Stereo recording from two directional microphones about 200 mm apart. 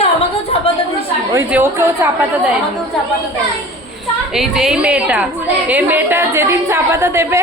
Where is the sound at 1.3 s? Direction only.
15° right (ahead or behind).